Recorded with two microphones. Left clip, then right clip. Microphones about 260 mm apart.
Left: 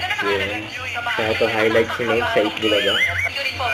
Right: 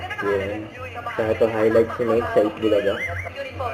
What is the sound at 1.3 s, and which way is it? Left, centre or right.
Speech, centre.